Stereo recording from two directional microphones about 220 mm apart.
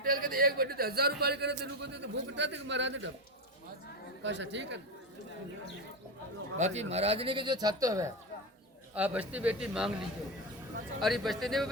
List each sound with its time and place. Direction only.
0.0 s a man's voice: 40° right (ahead or behind); by 3.1 s 55° right (ahead or behind)
4.2 s a man's voice: 55° right (ahead or behind)
6.6 s a man's voice: 30° right (ahead or behind); by 9.9 s 5° right (ahead or behind)
11.0 s speech: centre (ahead or behind)